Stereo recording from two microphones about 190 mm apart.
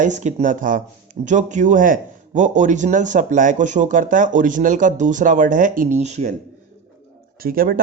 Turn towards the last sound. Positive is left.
turn(degrees=-50)  # may be behind; listen again after turning